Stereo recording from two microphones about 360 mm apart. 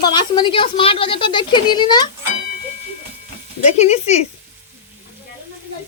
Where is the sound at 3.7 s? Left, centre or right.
Centre.